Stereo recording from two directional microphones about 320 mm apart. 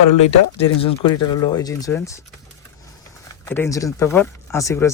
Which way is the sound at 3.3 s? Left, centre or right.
Centre.